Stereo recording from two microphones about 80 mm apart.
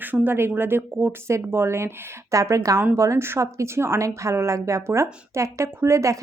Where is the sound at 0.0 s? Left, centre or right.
Right.